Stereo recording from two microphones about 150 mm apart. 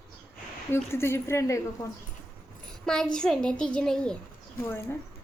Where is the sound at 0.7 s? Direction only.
15° left (ahead or behind).